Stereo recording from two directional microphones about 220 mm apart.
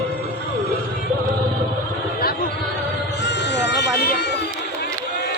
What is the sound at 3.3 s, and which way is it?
Music, 50° left (ahead or behind).